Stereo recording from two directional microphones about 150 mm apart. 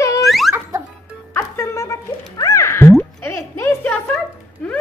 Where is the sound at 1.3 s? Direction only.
15° left (ahead or behind).